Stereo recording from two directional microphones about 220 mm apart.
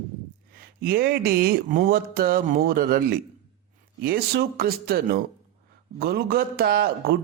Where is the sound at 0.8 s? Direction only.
45° right (ahead or behind).